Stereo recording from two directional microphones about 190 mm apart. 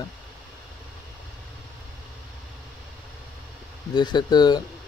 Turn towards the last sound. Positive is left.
turn(degrees=20)  # may be behind; listen again after turning